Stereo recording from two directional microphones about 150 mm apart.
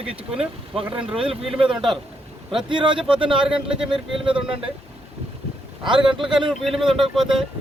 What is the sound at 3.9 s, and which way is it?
Speech, 35° right (ahead or behind).